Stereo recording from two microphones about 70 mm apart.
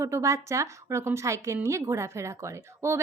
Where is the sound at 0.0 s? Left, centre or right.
Right.